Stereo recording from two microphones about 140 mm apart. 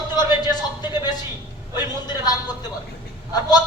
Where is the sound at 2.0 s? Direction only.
30° left (ahead or behind).